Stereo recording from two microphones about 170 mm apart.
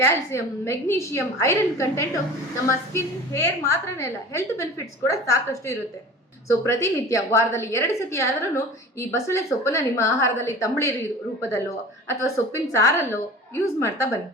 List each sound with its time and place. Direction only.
0.0 s a woman's voice: 15° left (ahead or behind)
12.0 s a woman's voice: 15° left (ahead or behind)